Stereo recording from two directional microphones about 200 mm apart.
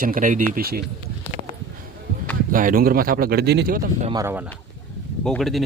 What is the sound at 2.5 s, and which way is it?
Speech, 45° right (ahead or behind).